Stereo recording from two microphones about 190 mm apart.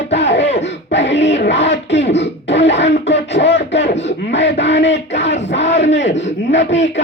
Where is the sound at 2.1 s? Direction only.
65° left (ahead or behind).